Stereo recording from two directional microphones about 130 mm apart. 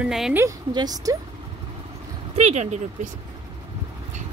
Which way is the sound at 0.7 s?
30° right (ahead or behind).